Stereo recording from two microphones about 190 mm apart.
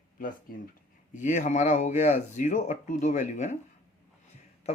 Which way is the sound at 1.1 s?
40° left (ahead or behind).